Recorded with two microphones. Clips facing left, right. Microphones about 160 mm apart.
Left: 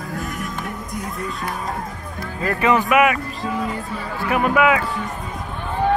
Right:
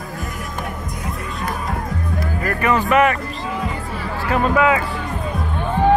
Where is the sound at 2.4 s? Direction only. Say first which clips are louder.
Left 2 dB; 20° left (ahead or behind).